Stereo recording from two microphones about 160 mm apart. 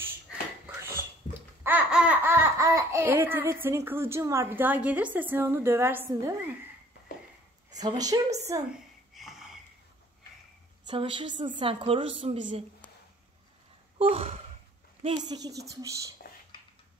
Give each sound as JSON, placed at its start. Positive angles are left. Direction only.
{"t": 1.6, "sound": "laughter", "side_deg": -10}
{"t": 3.6, "sound": "a woman's voice", "side_deg": -15}
{"t": 7.7, "sound": "a woman's voice", "side_deg": -25}
{"t": 9.1, "sound": "wheeze", "side_deg": 0}
{"t": 10.9, "sound": "a woman's voice", "side_deg": -30}
{"t": 13.9, "sound": "gasp", "side_deg": -35}
{"t": 15.0, "sound": "speech", "side_deg": -25}